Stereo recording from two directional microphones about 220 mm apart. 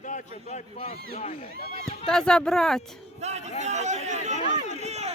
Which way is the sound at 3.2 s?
30° right (ahead or behind).